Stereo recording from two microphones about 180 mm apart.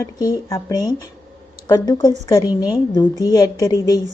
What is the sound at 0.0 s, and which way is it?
A woman's voice, 20° left (ahead or behind).